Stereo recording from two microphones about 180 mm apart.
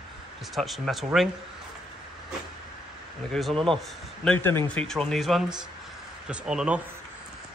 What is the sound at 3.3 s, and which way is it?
Speech, centre (ahead or behind).